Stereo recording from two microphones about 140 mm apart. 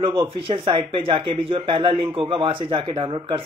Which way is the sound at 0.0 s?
40° right (ahead or behind).